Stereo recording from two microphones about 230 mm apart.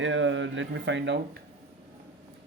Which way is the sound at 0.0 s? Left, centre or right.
Right.